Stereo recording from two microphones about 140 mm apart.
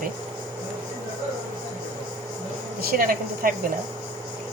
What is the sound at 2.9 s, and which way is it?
Speech, 90° right.